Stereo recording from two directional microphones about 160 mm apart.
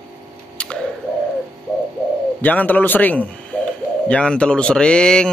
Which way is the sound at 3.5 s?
10° left (ahead or behind).